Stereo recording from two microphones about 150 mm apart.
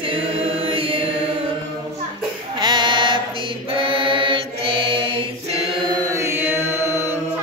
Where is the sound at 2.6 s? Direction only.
30° right (ahead or behind).